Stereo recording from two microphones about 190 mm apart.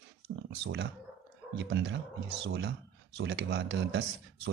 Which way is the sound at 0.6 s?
65° right (ahead or behind).